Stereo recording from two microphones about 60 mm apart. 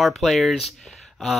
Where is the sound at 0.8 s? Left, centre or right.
Centre.